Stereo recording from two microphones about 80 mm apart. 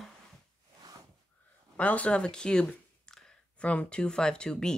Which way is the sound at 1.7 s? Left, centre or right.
Centre.